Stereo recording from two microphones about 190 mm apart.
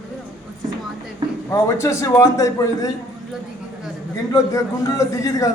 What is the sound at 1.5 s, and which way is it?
A man's voice, 15° left (ahead or behind).